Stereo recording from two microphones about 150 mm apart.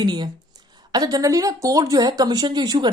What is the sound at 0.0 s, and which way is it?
Speech, 30° right (ahead or behind).